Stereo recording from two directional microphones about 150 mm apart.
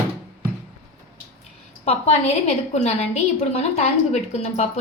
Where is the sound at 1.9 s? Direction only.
45° left (ahead or behind).